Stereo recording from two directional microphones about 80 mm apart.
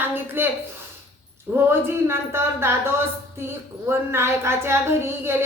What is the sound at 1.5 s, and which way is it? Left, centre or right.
Speech, right.